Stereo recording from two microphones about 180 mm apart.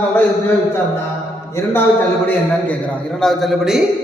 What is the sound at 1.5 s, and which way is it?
A man's voice, 15° left (ahead or behind).